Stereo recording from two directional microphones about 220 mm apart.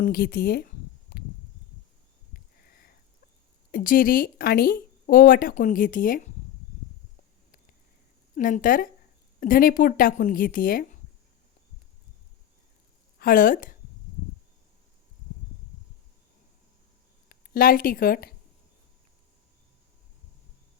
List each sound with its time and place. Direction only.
0.0 s speech: 45° left (ahead or behind)
2.3 s a sound: 40° left (ahead or behind)
3.7 s speech: 40° left (ahead or behind)
8.4 s speech: 40° left (ahead or behind)
13.1 s a woman's voice: 40° left (ahead or behind)
17.2 s speech: 40° left (ahead or behind)